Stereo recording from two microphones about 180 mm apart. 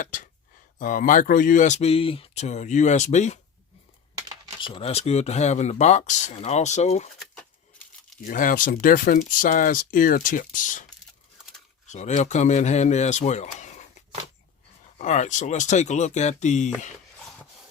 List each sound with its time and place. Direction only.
0.0 s a sound: 50° left (ahead or behind)
0.8 s speech: 45° left (ahead or behind)
4.6 s speech: 30° left (ahead or behind)
8.3 s speech: 50° left (ahead or behind)
11.9 s speech: 40° left (ahead or behind)
14.9 s speech: 40° left (ahead or behind)